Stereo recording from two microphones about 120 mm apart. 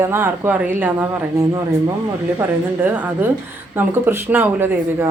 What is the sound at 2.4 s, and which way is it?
A woman's voice, 15° right (ahead or behind).